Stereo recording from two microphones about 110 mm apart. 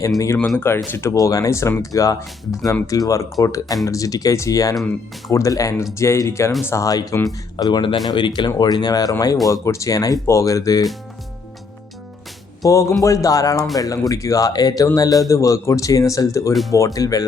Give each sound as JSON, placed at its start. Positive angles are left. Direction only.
{"t": 0.3, "sound": "speech", "side_deg": 5}
{"t": 0.9, "sound": "speech", "side_deg": 25}
{"t": 12.6, "sound": "speech", "side_deg": 30}